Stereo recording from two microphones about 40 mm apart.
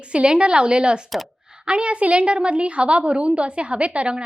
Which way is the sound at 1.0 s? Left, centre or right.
Centre.